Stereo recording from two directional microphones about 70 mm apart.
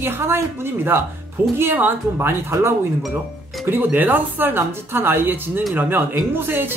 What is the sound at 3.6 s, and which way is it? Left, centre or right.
Speech, right.